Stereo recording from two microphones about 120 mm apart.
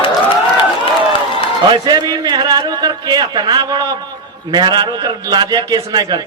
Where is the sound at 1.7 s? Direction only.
35° right (ahead or behind).